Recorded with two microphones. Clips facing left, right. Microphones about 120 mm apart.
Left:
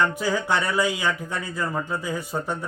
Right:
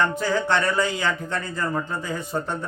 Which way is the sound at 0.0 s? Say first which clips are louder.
Right 1 dB; 10° left (ahead or behind).